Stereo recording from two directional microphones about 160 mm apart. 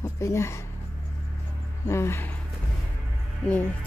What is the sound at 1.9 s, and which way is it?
Speech, 15° left (ahead or behind).